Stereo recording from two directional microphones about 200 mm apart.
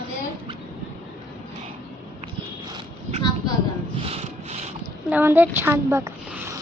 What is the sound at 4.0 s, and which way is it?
Rub, 30° right (ahead or behind).